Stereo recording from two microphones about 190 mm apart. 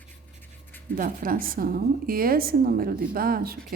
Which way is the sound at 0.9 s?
45° right (ahead or behind).